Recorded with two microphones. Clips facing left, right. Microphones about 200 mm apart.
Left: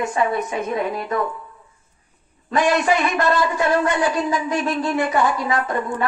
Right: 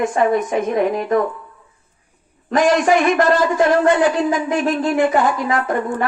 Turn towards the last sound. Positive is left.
turn(degrees=-50)  # may be behind; listen again after turning